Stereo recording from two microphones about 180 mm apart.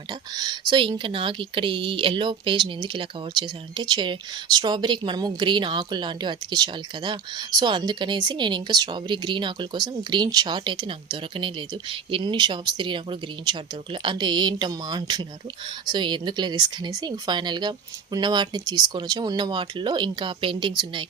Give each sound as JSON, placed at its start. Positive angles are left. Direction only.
{"t": 0.1, "sound": "speech", "side_deg": -25}